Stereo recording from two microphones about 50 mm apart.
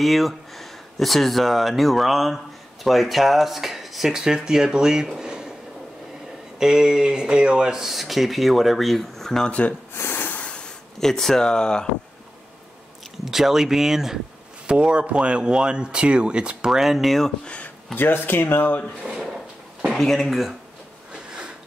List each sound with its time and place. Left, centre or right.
0.0 s speech: centre
6.6 s speech: centre
7.8 s speech: centre
9.5 s speech: left
9.9 s snort: left
10.3 s a sound: left
11.0 s speech: centre
13.2 s speech: centre
14.7 s speech: right; by 17.3 s centre
17.9 s speech: left
19.1 s drawer open or close: centre
19.9 s speech: centre